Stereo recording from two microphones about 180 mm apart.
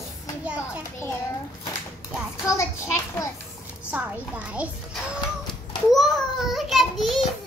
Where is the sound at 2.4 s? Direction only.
15° left (ahead or behind).